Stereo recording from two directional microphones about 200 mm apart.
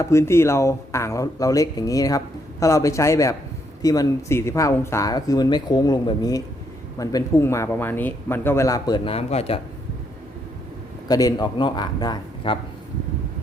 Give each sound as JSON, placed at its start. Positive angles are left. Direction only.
{"t": 0.0, "sound": "speech", "side_deg": 15}
{"t": 11.1, "sound": "a man's voice", "side_deg": 20}